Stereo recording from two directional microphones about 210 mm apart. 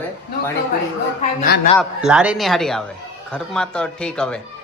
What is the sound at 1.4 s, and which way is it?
Speech, 45° left (ahead or behind).